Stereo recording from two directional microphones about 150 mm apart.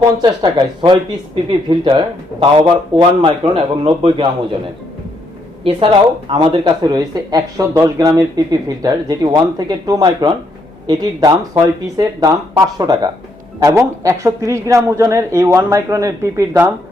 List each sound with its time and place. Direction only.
0.2 s a woman's voice: 30° right (ahead or behind)
5.6 s a woman's voice: 35° right (ahead or behind); by 16.6 s 20° right (ahead or behind)